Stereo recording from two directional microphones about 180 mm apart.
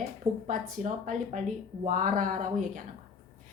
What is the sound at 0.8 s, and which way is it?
A woman's voice, 45° right (ahead or behind).